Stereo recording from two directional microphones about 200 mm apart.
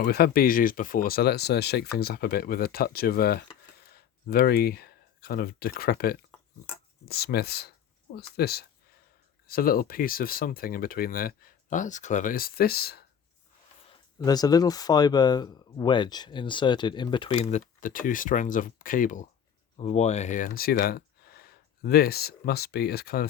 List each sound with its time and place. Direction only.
0.0 s speech: 50° left (ahead or behind)
13.9 s speech: 20° left (ahead or behind); by 23.2 s 50° left (ahead or behind)